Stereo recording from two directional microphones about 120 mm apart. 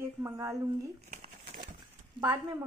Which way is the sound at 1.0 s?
65° right (ahead or behind).